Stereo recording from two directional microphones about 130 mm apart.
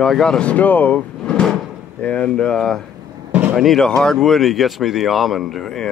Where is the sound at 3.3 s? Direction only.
15° right (ahead or behind).